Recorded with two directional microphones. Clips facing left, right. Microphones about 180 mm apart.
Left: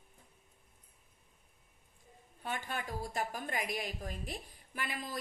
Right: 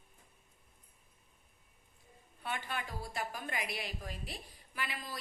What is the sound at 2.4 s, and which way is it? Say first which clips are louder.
A woman's voice: left 1 dB; 45° left (ahead or behind).